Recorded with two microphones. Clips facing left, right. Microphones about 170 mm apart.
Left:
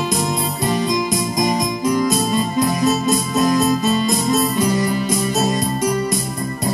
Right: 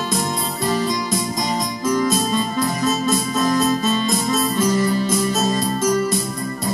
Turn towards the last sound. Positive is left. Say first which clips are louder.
# left 1 dB
turn(degrees=15)  # may be behind; listen again after turning